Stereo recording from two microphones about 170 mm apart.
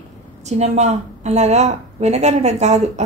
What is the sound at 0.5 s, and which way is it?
Speech, 40° right (ahead or behind).